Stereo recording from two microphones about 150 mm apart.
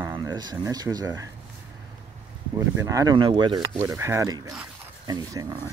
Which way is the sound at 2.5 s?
20° right (ahead or behind).